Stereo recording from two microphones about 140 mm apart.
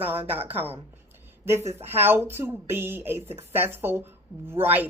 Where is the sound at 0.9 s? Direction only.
15° right (ahead or behind).